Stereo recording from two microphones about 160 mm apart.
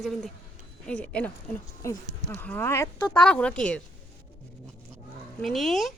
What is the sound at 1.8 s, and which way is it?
Speech, 20° left (ahead or behind).